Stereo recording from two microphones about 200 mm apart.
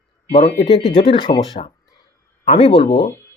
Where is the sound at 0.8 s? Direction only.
30° left (ahead or behind).